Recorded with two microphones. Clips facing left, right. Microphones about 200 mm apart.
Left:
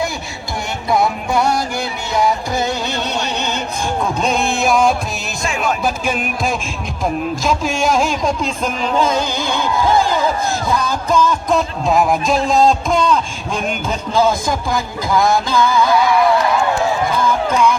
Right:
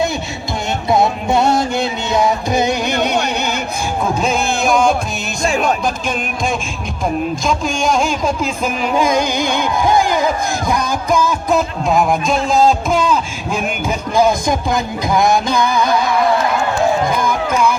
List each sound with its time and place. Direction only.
0.9 s music: 25° right (ahead or behind)
4.2 s a sound: centre (ahead or behind)
5.5 s music: 35° right (ahead or behind)
5.8 s music: 5° left (ahead or behind)
7.4 s speech: 5° left (ahead or behind); by 15.9 s 20° right (ahead or behind)
17.2 s a sound: 10° right (ahead or behind)